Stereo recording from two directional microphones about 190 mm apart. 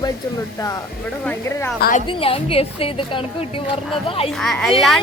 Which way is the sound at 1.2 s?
10° left (ahead or behind).